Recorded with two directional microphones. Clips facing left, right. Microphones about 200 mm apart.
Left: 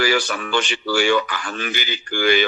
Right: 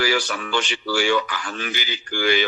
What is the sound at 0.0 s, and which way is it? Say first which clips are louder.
A man's voice: left 2 dB; 55° left (ahead or behind).